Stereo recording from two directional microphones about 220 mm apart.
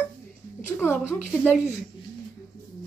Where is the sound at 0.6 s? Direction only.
10° left (ahead or behind).